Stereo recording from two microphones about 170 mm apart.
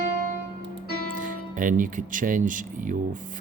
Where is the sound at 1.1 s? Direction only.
50° right (ahead or behind).